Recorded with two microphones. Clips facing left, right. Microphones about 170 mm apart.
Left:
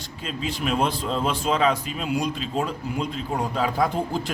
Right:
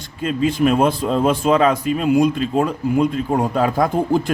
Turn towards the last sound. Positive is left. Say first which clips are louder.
# right 7 dB
turn(degrees=-50)  # may be behind; listen again after turning